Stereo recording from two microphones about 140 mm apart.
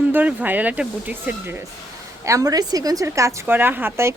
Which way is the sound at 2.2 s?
25° right (ahead or behind).